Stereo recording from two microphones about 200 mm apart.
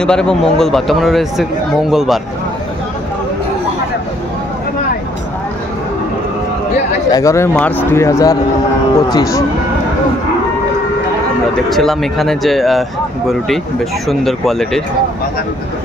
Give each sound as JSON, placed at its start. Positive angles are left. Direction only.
{"t": 0.0, "sound": "a man's voice", "side_deg": 5}
{"t": 7.1, "sound": "speech", "side_deg": 15}
{"t": 11.7, "sound": "a man's voice", "side_deg": 0}
{"t": 14.0, "sound": "a man's voice", "side_deg": 0}